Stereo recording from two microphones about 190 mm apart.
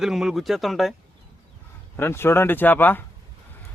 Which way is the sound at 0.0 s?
Centre (ahead or behind).